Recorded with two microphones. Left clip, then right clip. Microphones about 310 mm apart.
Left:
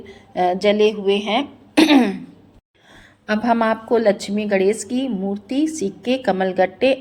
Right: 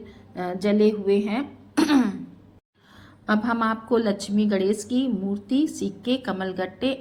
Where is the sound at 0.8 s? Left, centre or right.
Left.